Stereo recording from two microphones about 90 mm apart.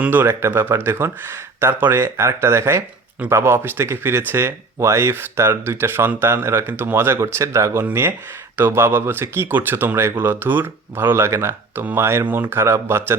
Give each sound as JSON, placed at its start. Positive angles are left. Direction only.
{"t": 0.0, "sound": "speech", "side_deg": -20}